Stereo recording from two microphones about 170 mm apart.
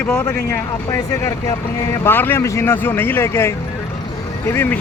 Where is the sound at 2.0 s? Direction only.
10° left (ahead or behind).